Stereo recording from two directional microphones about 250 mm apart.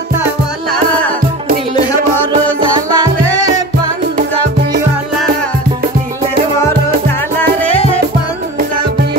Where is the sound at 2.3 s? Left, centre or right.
Centre.